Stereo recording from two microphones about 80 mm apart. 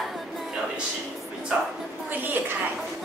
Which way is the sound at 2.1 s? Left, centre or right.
Right.